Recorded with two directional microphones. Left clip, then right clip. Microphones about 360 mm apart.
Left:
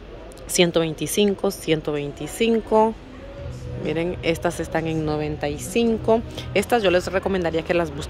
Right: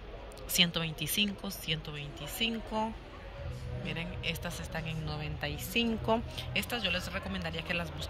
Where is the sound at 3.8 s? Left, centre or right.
Centre.